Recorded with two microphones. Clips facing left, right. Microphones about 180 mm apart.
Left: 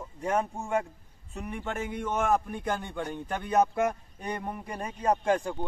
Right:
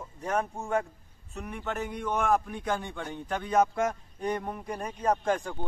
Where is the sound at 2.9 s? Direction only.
15° left (ahead or behind).